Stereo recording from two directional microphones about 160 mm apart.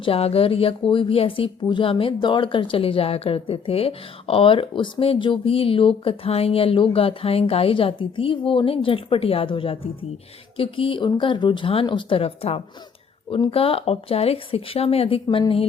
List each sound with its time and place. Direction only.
0.0 s speech: 40° left (ahead or behind)